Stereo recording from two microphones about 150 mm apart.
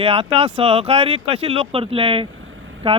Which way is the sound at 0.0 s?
35° right (ahead or behind).